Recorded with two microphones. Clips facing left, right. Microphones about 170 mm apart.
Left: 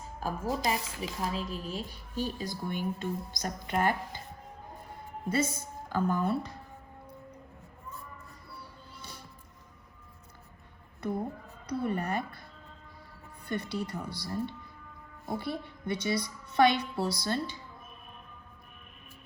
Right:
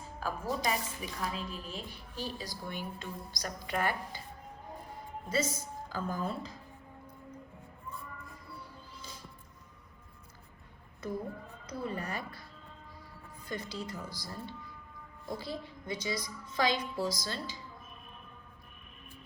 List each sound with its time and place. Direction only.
0.2 s a woman's voice: 40° left (ahead or behind)
5.3 s a woman's voice: 55° left (ahead or behind)
9.0 s music: 65° left (ahead or behind)
11.0 s a woman's voice: 60° left (ahead or behind)
13.5 s a woman's voice: 65° left (ahead or behind)